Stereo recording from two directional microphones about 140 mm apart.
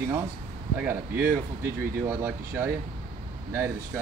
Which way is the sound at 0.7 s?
15° right (ahead or behind).